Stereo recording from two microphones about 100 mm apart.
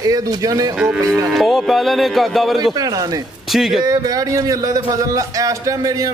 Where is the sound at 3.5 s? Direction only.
Centre (ahead or behind).